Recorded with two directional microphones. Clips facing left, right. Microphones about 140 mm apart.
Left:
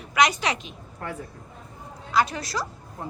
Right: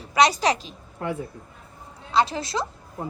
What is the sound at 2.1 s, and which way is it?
Speech, 25° right (ahead or behind).